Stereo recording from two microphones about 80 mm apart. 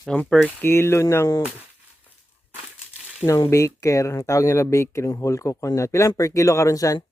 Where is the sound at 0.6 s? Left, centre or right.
Left.